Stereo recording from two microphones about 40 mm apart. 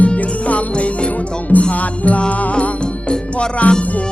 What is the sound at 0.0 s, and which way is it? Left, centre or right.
Music, left.